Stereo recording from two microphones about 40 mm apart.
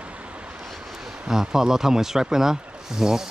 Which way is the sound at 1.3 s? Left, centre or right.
Centre.